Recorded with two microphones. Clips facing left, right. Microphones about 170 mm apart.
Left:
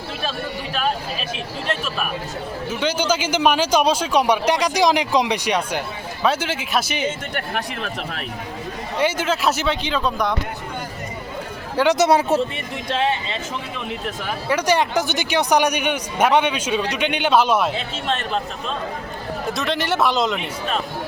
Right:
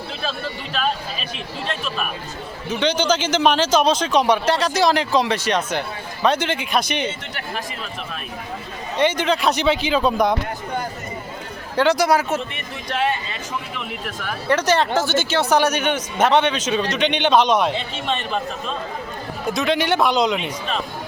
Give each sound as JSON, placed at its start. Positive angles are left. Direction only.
{"t": 2.6, "sound": "a man's voice", "side_deg": 10}
{"t": 7.3, "sound": "speech", "side_deg": 65}
{"t": 9.0, "sound": "a man's voice", "side_deg": 5}
{"t": 9.8, "sound": "speech", "side_deg": -5}
{"t": 11.8, "sound": "a man's voice", "side_deg": 20}
{"t": 19.5, "sound": "a man's voice", "side_deg": 0}